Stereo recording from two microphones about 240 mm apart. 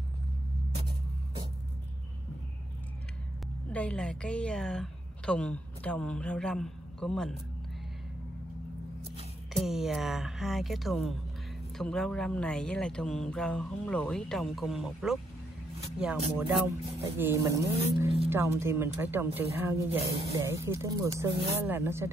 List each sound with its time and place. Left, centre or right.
3.7 s a woman's voice: centre
9.6 s speech: centre